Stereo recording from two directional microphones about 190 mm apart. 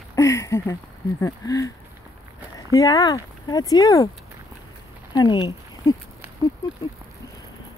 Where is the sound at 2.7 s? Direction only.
20° left (ahead or behind).